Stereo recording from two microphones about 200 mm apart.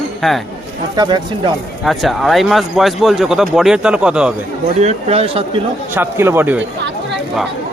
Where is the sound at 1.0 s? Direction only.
20° right (ahead or behind).